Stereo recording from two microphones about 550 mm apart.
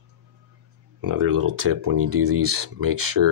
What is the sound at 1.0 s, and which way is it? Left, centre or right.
Speech, right.